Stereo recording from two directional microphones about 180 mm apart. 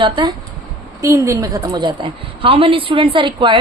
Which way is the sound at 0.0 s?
25° right (ahead or behind).